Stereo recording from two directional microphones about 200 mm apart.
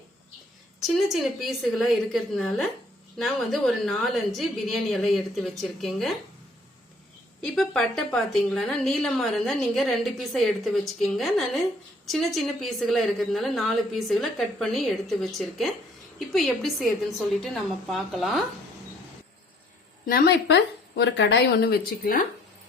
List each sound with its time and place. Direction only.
0.8 s a woman's voice: centre (ahead or behind)
7.4 s a woman's voice: centre (ahead or behind)
20.1 s speech: 55° left (ahead or behind)